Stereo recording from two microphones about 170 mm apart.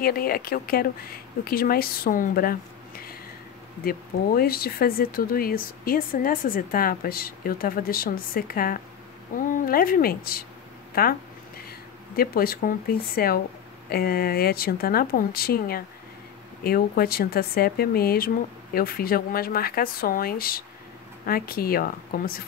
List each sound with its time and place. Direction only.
0.0 s speech: 60° left (ahead or behind)
12.2 s speech: 60° left (ahead or behind)